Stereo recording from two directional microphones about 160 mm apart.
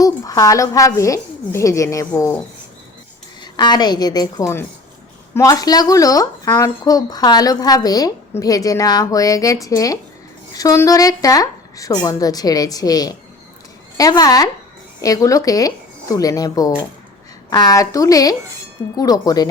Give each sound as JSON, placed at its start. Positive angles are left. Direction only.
{"t": 0.0, "sound": "speech", "side_deg": 20}
{"t": 3.4, "sound": "speech", "side_deg": 25}